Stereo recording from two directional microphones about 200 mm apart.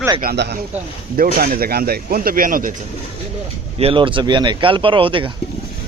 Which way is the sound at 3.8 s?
25° right (ahead or behind).